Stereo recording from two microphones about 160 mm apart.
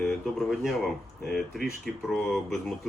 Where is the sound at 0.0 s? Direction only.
Centre (ahead or behind).